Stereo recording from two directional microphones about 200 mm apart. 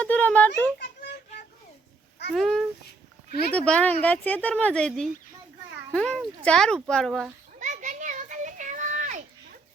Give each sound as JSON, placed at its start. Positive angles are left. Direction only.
{"t": 0.0, "sound": "speech", "side_deg": 5}
{"t": 2.3, "sound": "a child's voice", "side_deg": 0}
{"t": 3.7, "sound": "a child's voice", "side_deg": 5}
{"t": 7.6, "sound": "children playing", "side_deg": -40}